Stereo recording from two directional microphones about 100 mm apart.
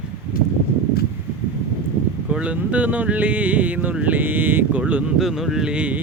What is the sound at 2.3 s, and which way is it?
Speech, 10° right (ahead or behind).